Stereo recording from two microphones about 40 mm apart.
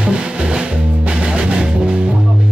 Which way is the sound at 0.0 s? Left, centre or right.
Right.